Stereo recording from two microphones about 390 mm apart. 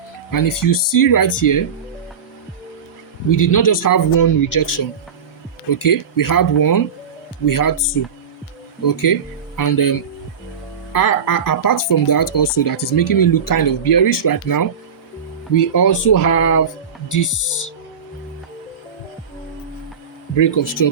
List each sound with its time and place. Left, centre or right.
0.3 s speech: left
3.2 s speech: left
10.9 s speech: left
20.3 s speech: left